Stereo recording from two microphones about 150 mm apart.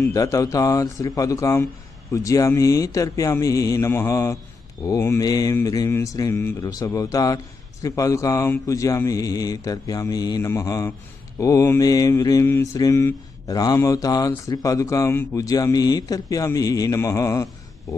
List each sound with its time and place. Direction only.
0.0 s mantra: 25° left (ahead or behind)